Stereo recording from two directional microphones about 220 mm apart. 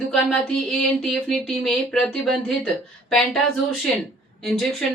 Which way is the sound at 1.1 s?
Centre (ahead or behind).